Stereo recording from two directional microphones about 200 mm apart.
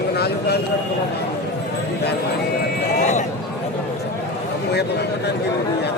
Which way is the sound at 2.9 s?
35° left (ahead or behind).